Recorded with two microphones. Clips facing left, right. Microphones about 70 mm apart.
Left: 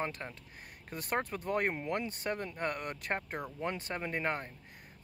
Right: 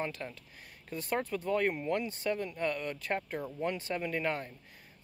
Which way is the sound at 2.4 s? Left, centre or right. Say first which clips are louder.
Right 2 dB; left.